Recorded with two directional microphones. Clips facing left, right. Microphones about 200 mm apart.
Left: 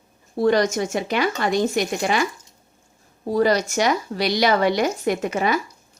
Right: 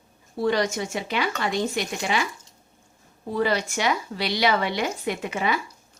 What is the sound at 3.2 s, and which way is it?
Speech, 40° left (ahead or behind).